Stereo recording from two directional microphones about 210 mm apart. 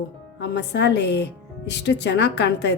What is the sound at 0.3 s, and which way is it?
A woman's voice, 55° left (ahead or behind).